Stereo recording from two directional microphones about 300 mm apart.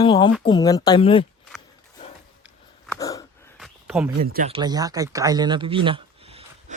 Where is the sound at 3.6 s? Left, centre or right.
Centre.